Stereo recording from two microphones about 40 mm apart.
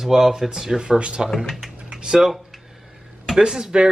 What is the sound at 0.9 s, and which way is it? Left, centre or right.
Speech, right.